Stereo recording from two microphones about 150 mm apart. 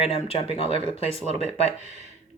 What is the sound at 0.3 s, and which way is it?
Speech, 40° left (ahead or behind).